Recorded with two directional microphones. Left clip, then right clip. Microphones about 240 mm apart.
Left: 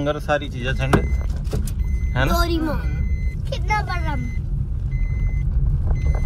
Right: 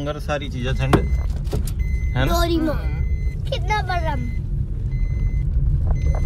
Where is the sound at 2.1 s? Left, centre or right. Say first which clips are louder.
Even; centre.